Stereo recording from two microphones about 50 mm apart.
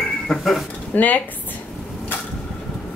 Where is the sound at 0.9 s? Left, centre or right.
Left.